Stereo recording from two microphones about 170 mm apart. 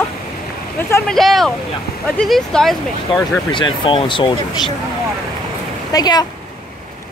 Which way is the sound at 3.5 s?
30° left (ahead or behind).